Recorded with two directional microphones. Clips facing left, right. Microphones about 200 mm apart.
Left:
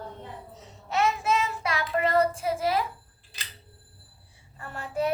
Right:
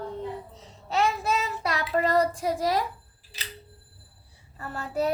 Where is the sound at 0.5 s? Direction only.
35° right (ahead or behind).